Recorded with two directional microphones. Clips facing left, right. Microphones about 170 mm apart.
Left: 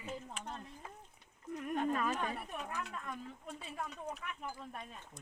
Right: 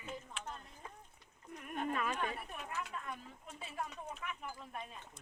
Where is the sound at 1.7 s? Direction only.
40° left (ahead or behind).